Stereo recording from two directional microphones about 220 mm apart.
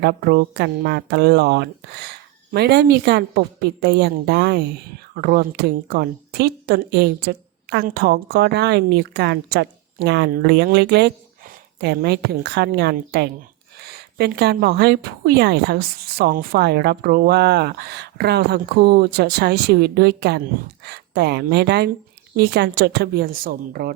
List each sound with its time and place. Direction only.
0.0 s speech: 45° right (ahead or behind)